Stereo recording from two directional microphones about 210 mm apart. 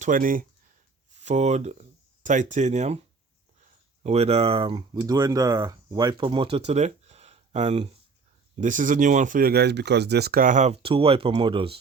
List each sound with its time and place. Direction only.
0.0 s speech: 40° right (ahead or behind)
4.0 s speech: 30° right (ahead or behind)
6.7 s a sound: 30° right (ahead or behind)
8.5 s speech: 35° right (ahead or behind)